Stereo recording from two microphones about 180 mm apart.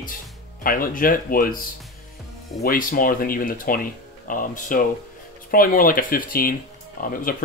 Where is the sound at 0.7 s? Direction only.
50° left (ahead or behind).